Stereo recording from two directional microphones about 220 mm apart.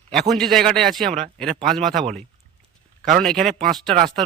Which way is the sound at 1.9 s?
35° right (ahead or behind).